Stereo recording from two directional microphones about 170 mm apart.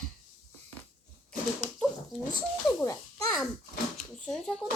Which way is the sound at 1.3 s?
5° left (ahead or behind).